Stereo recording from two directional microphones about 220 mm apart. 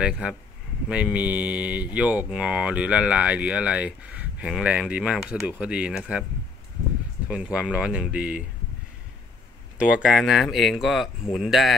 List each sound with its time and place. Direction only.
0.0 s speech: 5° right (ahead or behind)
7.2 s speech: 5° right (ahead or behind)
9.8 s speech: 5° right (ahead or behind)